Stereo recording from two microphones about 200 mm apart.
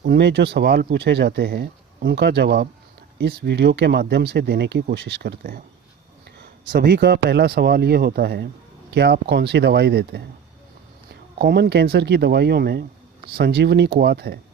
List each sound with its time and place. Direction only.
0.0 s speech: 55° right (ahead or behind)
6.7 s speech: 50° right (ahead or behind)
11.3 s speech: 50° right (ahead or behind)